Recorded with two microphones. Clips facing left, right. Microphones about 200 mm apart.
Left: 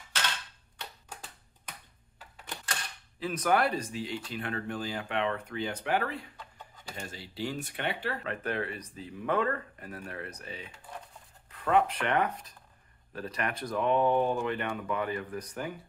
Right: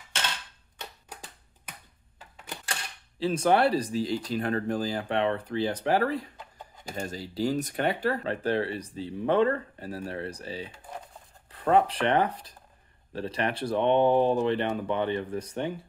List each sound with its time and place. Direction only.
3.2 s speech: 30° right (ahead or behind)